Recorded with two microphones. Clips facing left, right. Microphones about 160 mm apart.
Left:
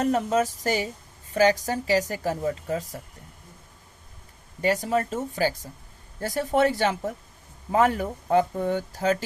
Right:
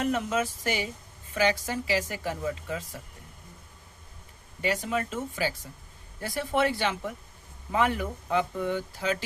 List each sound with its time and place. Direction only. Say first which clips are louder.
0.0 s a woman's voice: left 5 dB; 35° left (ahead or behind)
4.6 s a woman's voice: left 5 dB; 40° left (ahead or behind)